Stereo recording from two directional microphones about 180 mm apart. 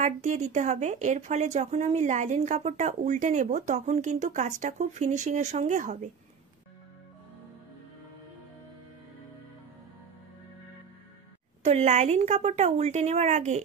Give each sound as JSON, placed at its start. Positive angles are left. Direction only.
{"t": 0.0, "sound": "a woman's voice", "side_deg": -45}
{"t": 11.6, "sound": "a woman's voice", "side_deg": -40}